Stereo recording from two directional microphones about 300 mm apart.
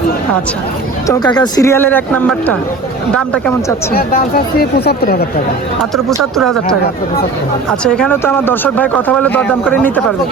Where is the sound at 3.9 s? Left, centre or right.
Left.